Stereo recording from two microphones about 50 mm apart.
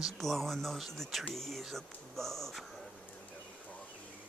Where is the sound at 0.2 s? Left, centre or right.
Centre.